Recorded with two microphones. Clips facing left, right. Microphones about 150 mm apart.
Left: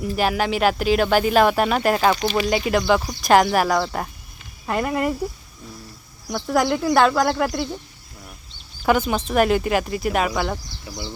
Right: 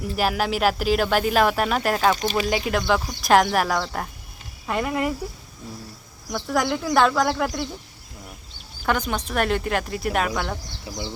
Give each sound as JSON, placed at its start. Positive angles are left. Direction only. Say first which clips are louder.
{"t": 0.0, "sound": "speech", "louder": "left 2 dB", "side_deg": 0}
{"t": 6.3, "sound": "speech", "louder": "left 3 dB", "side_deg": 5}
{"t": 8.9, "sound": "speech", "louder": "left 5 dB", "side_deg": 5}
{"t": 10.9, "sound": "speech", "louder": "right 1 dB", "side_deg": -25}